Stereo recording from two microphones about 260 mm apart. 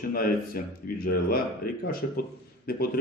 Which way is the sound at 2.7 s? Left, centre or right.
Left.